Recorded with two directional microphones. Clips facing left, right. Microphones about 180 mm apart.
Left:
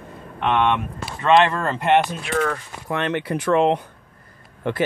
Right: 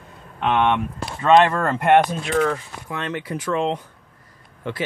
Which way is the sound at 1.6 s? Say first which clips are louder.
Right 2 dB; 50° right (ahead or behind).